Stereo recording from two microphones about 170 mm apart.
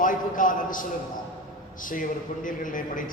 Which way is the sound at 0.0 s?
50° left (ahead or behind).